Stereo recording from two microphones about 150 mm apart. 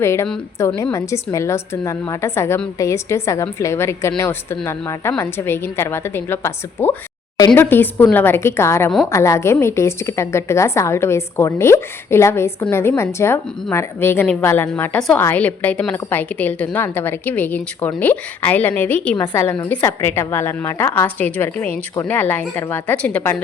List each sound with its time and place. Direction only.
0.0 s a woman's voice: 20° left (ahead or behind)
7.6 s a woman's voice: 15° left (ahead or behind)